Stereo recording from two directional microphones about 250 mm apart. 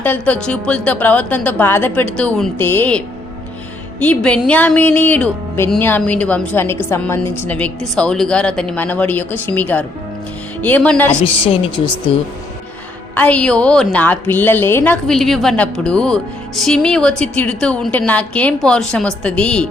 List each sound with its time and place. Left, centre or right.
0.0 s a woman's voice: centre
4.0 s a woman's voice: centre
11.1 s a woman's voice: left
13.1 s a woman's voice: centre